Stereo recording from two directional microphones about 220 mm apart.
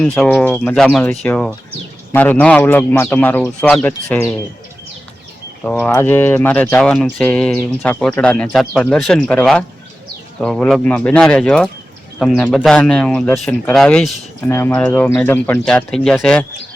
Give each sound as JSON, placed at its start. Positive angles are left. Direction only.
{"t": 0.0, "sound": "speech", "side_deg": 5}
{"t": 5.6, "sound": "speech", "side_deg": 10}